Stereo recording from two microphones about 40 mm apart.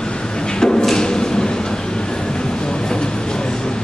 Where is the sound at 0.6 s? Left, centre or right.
Centre.